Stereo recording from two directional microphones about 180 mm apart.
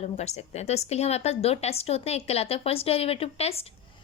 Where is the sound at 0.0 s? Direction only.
35° left (ahead or behind).